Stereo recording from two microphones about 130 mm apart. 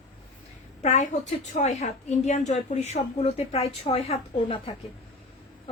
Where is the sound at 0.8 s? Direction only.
60° left (ahead or behind).